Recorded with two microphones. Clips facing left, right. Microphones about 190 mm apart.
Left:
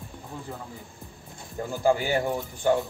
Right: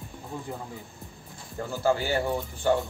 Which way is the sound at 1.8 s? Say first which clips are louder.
Left 2 dB; 15° left (ahead or behind).